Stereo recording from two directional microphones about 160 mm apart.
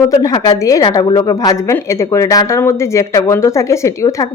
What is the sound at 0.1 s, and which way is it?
A woman's voice, 20° left (ahead or behind).